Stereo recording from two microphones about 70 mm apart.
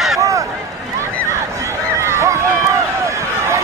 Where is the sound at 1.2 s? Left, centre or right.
Right.